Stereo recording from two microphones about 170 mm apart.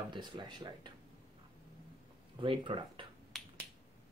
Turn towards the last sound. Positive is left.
turn(degrees=0)  # may be behind; listen again after turning